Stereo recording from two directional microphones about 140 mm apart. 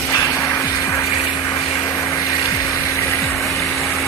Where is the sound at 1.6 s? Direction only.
35° left (ahead or behind).